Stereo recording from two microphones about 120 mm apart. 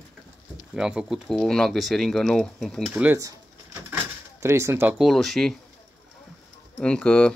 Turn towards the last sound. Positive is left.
turn(degrees=10)  # may be behind; listen again after turning